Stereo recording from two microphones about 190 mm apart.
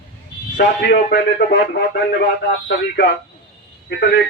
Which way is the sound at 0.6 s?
60° left (ahead or behind).